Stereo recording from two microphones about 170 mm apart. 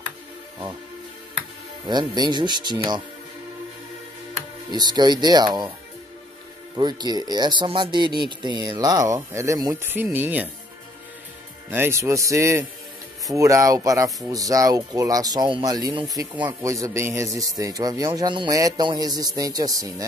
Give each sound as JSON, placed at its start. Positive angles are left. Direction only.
{"t": 1.9, "sound": "speech", "side_deg": -25}
{"t": 4.6, "sound": "speech", "side_deg": -25}
{"t": 6.8, "sound": "speech", "side_deg": -25}
{"t": 11.7, "sound": "speech", "side_deg": -15}